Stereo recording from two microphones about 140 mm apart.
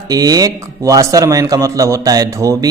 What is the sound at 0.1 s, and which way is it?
A man's voice, 25° right (ahead or behind).